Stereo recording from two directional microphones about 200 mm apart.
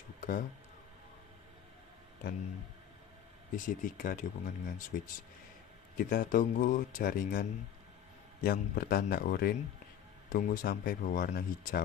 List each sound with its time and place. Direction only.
0.2 s a sound: 45° left (ahead or behind)
3.5 s speech: 40° left (ahead or behind)
8.5 s speech: 50° left (ahead or behind)